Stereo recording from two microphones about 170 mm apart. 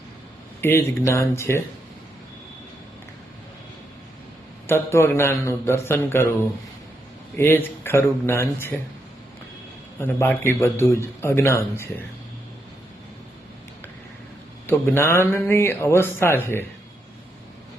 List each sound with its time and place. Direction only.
0.6 s speech: 15° left (ahead or behind)
4.6 s speech: 15° left (ahead or behind)
7.3 s speech: 15° left (ahead or behind)
10.0 s speech: 15° left (ahead or behind)
14.7 s speech: 15° left (ahead or behind)